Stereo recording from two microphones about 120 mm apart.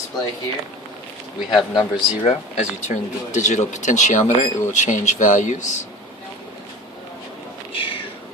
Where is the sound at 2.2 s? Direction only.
65° left (ahead or behind); by 5.6 s 90° left.